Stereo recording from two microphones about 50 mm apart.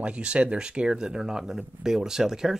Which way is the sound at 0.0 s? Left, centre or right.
Right.